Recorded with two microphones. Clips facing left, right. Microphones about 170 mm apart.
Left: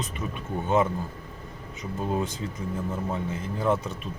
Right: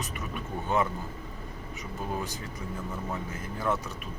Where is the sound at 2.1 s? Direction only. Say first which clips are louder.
Left 6 dB; 25° left (ahead or behind).